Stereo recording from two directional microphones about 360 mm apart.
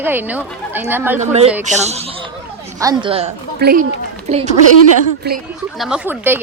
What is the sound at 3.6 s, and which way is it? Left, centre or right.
Speech, right.